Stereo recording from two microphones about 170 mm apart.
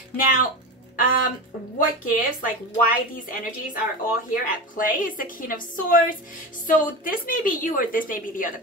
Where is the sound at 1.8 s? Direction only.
55° left (ahead or behind).